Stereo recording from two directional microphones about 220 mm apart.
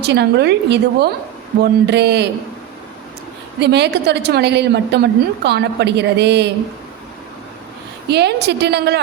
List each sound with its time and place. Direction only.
0.0 s a woman's voice: 50° right (ahead or behind)
3.6 s a woman's voice: 50° right (ahead or behind)
8.0 s a woman's voice: 50° right (ahead or behind)